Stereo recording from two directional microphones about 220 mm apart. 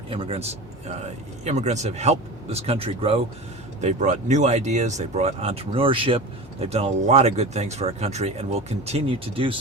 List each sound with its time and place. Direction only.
0.1 s speech: 25° right (ahead or behind)
1.5 s speech: 30° right (ahead or behind)